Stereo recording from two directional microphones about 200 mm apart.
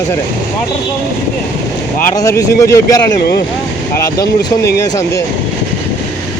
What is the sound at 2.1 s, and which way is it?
Speech, 15° left (ahead or behind).